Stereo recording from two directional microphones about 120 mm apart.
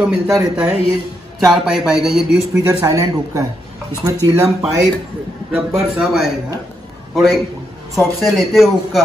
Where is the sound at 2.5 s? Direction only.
30° right (ahead or behind).